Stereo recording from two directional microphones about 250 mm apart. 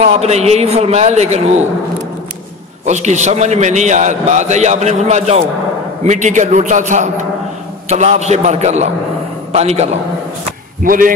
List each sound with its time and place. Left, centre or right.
0.0 s a man's voice: right
2.8 s a man's voice: right